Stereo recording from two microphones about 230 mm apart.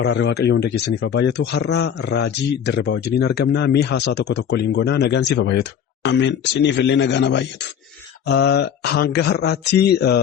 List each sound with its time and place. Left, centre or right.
0.0 s speech: left